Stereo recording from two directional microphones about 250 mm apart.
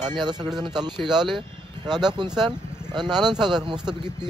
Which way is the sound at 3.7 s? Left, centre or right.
Centre.